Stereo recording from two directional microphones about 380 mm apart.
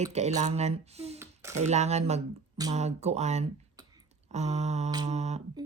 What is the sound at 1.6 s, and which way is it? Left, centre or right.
Speech, centre.